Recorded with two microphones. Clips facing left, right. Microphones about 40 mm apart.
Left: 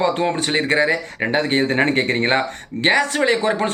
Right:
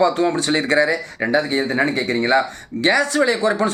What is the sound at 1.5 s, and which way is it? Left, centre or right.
Speech, left.